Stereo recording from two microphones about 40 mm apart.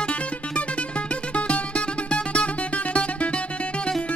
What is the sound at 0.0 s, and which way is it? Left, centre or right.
Music, left.